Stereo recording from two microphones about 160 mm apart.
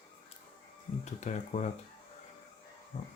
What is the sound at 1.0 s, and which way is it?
Speech, 50° left (ahead or behind).